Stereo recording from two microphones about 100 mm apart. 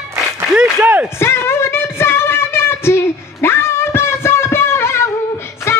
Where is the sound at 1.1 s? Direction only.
25° left (ahead or behind).